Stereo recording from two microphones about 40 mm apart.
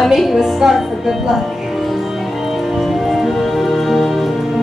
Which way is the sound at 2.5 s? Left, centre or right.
Centre.